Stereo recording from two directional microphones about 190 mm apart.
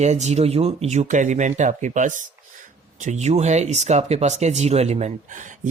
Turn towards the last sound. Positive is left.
turn(degrees=-40)  # may be behind; listen again after turning